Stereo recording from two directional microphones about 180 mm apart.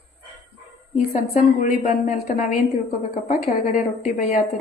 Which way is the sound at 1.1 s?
50° left (ahead or behind).